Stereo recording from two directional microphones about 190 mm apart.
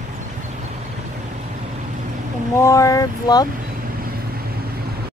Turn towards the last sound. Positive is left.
turn(degrees=20)  # may be behind; listen again after turning